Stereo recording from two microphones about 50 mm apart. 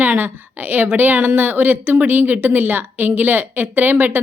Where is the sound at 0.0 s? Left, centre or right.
Right.